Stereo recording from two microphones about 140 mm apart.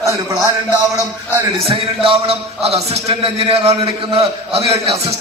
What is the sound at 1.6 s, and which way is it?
A man's voice, 40° right (ahead or behind).